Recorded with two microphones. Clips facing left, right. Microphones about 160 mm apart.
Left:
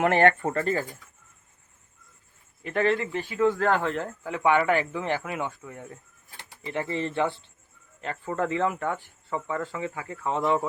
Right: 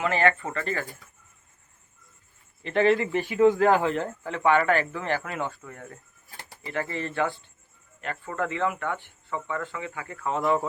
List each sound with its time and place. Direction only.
0.0 s speech: 55° left (ahead or behind)
0.4 s speech: 40° left (ahead or behind)
2.8 s speech: 10° right (ahead or behind)
4.3 s a man's voice: 15° left (ahead or behind)
6.7 s speech: 20° left (ahead or behind)